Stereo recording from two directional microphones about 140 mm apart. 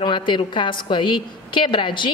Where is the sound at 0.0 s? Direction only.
35° left (ahead or behind).